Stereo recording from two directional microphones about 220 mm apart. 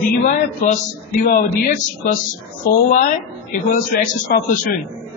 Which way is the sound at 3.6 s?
40° left (ahead or behind).